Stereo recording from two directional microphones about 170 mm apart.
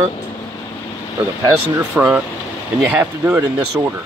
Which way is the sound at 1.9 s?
10° right (ahead or behind).